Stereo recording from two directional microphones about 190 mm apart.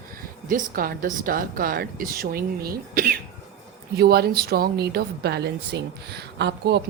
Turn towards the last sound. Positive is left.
turn(degrees=-60)  # may be behind; listen again after turning